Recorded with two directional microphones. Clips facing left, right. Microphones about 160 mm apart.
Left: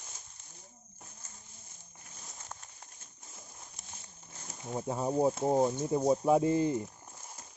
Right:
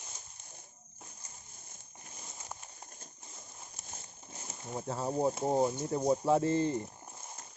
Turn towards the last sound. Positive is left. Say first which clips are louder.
# left 2 dB
turn(degrees=10)  # may be behind; listen again after turning